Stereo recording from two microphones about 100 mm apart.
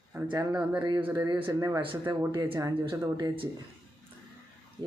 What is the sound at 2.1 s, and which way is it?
Speech, 45° right (ahead or behind).